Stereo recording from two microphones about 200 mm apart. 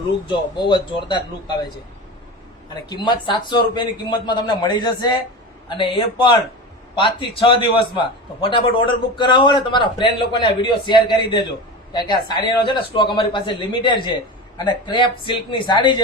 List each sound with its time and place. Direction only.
0.3 s speech: 20° left (ahead or behind)
2.9 s speech: 20° left (ahead or behind)